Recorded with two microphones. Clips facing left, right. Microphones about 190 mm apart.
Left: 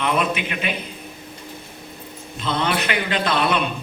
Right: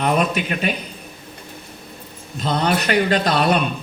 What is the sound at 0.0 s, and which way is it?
Speech, 40° right (ahead or behind).